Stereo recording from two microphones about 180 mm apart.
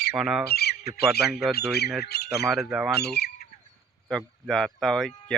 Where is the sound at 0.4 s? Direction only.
60° left (ahead or behind).